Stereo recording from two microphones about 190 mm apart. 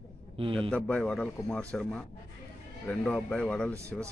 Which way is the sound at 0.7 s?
5° left (ahead or behind).